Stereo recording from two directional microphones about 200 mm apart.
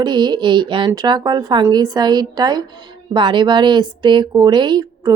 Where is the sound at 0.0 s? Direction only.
20° right (ahead or behind).